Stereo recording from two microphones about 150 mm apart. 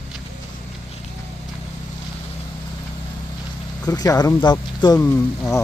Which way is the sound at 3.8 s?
25° left (ahead or behind).